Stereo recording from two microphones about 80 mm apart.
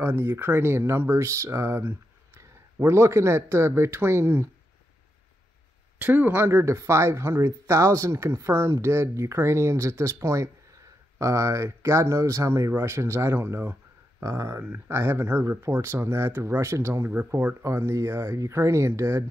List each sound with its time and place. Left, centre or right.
0.0 s speech: right
2.9 s speech: right
5.9 s speech: right